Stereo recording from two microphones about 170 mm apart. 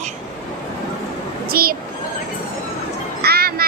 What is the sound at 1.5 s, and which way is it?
Speech, 60° right (ahead or behind).